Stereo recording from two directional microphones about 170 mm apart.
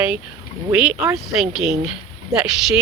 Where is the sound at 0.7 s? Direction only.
5° right (ahead or behind).